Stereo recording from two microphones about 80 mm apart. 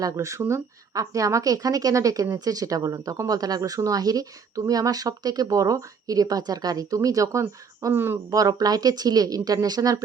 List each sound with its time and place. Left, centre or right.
0.0 s speech: right
7.9 s speech: right
8.3 s speech: right